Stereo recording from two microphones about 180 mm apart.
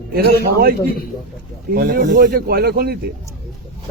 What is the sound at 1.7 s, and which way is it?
Speech, 50° right (ahead or behind).